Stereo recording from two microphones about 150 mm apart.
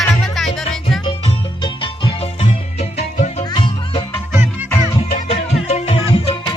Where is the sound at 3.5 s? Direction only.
35° left (ahead or behind).